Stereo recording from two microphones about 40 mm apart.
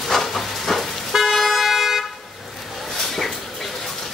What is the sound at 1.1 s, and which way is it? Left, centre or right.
Toot, centre.